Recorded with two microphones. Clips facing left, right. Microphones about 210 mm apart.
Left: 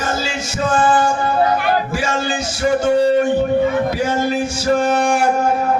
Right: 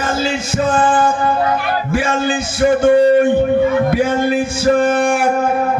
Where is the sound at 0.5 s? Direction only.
55° right (ahead or behind).